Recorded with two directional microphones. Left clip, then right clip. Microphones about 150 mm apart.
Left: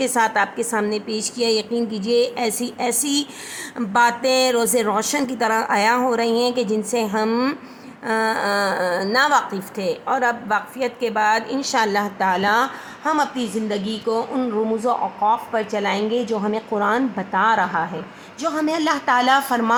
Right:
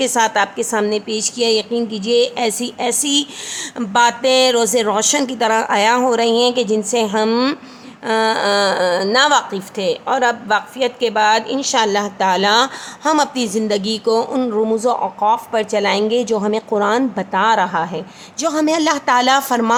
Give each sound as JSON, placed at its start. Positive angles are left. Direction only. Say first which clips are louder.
{"t": 0.0, "sound": "a woman's voice", "louder": "right 3 dB", "side_deg": -15}